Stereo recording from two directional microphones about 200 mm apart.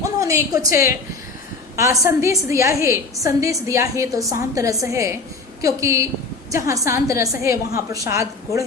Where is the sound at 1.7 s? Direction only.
15° right (ahead or behind).